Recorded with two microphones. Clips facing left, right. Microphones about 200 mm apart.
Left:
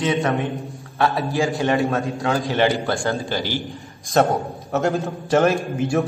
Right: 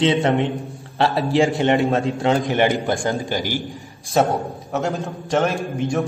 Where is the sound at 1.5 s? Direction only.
25° right (ahead or behind).